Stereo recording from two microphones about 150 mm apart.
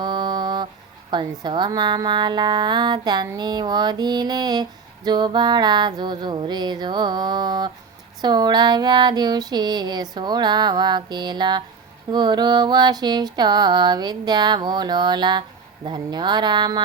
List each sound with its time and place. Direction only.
0.0 s mantra: 30° right (ahead or behind)
1.1 s music: 30° right (ahead or behind)